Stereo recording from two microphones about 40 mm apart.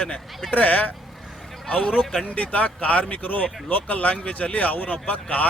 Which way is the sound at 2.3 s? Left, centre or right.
Left.